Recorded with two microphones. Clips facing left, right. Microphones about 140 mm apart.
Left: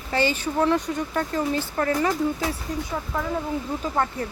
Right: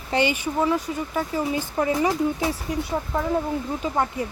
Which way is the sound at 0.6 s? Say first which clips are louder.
Left 2 dB; 5° right (ahead or behind).